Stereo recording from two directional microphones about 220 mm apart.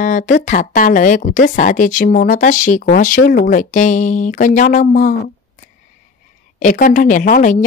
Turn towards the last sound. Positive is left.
turn(degrees=35)  # may be behind; listen again after turning